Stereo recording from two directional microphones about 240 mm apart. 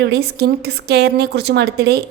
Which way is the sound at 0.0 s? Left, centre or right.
Right.